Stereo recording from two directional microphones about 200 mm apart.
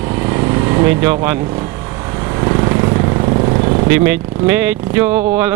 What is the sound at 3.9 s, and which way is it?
Speech, 10° right (ahead or behind).